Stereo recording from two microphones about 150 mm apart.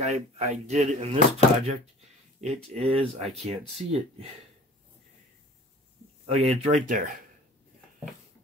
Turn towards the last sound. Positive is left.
turn(degrees=-55)  # may be behind; listen again after turning